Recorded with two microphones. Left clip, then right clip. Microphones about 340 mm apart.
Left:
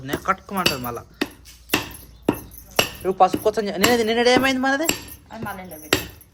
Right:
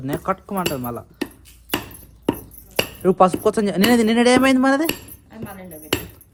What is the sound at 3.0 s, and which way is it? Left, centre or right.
Speech, right.